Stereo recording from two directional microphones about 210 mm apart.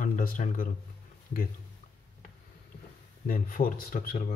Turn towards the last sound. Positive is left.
turn(degrees=40)  # may be behind; listen again after turning